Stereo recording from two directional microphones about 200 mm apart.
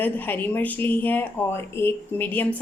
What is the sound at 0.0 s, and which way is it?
Speech, 10° left (ahead or behind).